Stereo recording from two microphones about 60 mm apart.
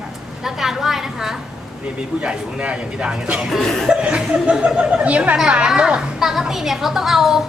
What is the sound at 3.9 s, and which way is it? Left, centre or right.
A woman's voice, centre.